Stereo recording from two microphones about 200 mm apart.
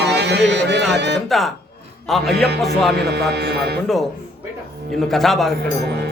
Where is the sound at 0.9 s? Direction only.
60° right (ahead or behind).